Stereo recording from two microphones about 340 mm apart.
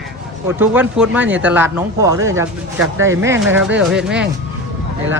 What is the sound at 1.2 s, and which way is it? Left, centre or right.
Speech, right.